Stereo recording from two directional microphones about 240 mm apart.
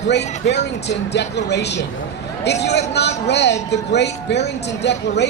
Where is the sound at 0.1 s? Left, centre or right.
Left.